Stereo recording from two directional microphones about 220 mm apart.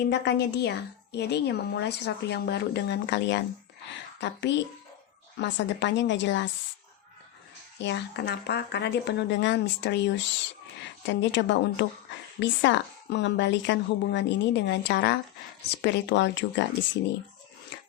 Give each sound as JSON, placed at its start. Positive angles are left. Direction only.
{"t": 0.0, "sound": "a woman's voice", "side_deg": 50}
{"t": 7.8, "sound": "a woman's voice", "side_deg": 50}